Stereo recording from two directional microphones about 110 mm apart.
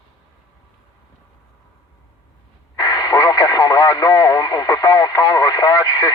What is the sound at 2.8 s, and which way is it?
Speech, 35° left (ahead or behind).